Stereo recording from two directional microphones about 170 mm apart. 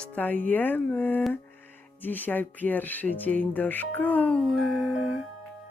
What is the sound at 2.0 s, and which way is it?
Speech, 10° left (ahead or behind).